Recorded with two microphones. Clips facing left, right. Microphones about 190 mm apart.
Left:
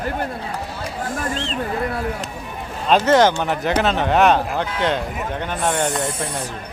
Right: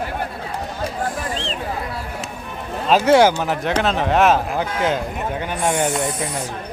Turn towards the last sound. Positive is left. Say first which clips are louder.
# right 1 dB
turn(degrees=0)  # may be behind; listen again after turning